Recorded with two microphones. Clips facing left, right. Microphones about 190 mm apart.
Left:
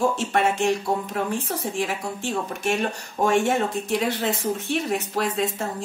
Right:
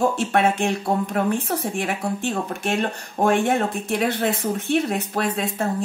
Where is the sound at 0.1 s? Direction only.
60° right (ahead or behind).